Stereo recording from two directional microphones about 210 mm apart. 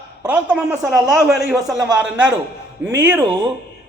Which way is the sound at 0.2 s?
5° right (ahead or behind).